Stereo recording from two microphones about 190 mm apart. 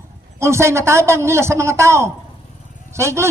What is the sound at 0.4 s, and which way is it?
Speech, 15° right (ahead or behind).